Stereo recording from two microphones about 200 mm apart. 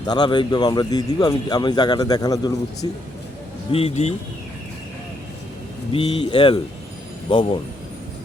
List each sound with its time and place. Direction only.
0.0 s speech: 20° left (ahead or behind)
5.9 s speech: 25° left (ahead or behind)